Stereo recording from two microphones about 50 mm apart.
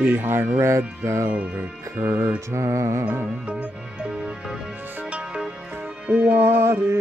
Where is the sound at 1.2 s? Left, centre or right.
Right.